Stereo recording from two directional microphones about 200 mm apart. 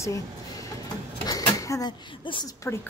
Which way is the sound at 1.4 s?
15° left (ahead or behind).